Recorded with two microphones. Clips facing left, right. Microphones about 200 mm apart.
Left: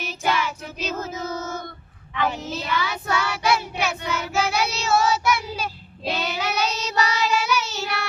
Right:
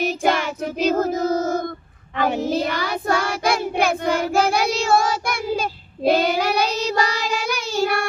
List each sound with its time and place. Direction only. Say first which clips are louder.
0.0 s child singing: right 5 dB; 50° right (ahead or behind)
2.1 s child singing: right 6 dB; 50° right (ahead or behind)